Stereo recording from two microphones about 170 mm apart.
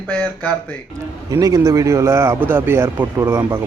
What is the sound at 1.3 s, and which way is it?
Speech, 20° right (ahead or behind).